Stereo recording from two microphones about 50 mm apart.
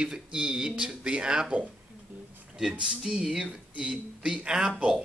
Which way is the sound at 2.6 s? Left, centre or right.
Centre.